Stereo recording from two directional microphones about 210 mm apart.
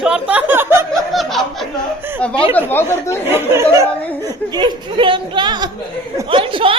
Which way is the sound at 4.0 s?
10° left (ahead or behind).